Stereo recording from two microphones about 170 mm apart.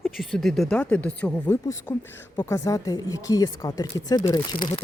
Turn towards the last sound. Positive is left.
turn(degrees=30)  # may be behind; listen again after turning